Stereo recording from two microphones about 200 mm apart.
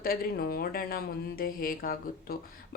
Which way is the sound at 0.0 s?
50° left (ahead or behind).